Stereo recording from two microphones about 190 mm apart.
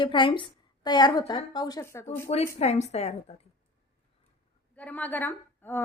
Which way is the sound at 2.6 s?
35° left (ahead or behind).